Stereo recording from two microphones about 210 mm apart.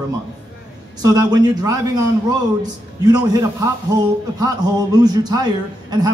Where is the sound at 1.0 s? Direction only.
20° right (ahead or behind).